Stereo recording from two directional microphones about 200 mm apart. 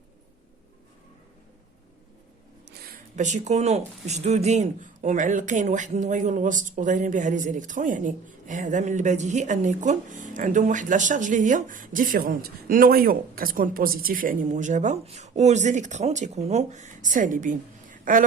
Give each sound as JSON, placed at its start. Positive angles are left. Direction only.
{"t": 2.6, "sound": "speech", "side_deg": -50}